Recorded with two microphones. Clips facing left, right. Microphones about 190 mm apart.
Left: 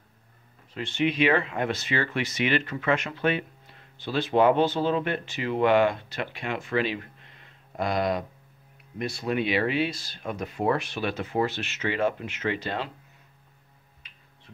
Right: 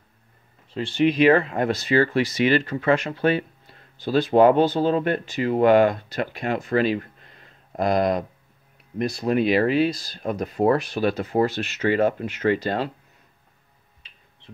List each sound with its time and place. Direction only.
0.7 s speech: 35° right (ahead or behind)